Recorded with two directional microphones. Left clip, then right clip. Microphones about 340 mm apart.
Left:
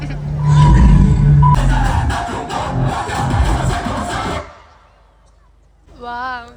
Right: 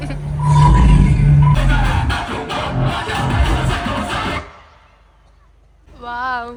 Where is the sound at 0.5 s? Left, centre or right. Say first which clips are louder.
Right 1 dB; centre.